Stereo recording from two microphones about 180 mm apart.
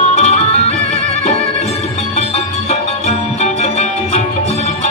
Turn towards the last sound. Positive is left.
turn(degrees=40)  # may be behind; listen again after turning